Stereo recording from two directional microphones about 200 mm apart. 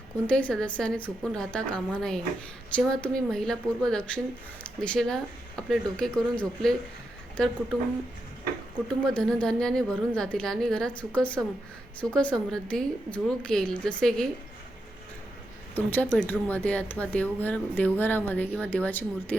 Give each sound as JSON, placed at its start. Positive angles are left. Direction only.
{"t": 0.3, "sound": "a woman's voice", "side_deg": 5}
{"t": 8.9, "sound": "a woman's voice", "side_deg": 5}
{"t": 15.7, "sound": "speech", "side_deg": 10}